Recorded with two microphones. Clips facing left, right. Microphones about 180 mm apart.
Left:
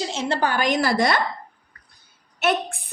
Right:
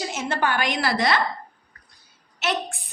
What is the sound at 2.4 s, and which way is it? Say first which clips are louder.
Speech: left 4 dB; 55° left (ahead or behind).